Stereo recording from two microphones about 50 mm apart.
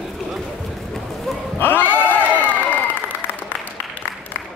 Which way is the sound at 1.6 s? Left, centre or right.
Left.